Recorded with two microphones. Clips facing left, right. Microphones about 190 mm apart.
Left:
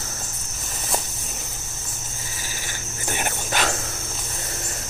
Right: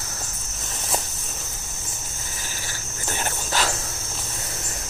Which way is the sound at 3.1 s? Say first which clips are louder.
Left 1 dB; 20° left (ahead or behind).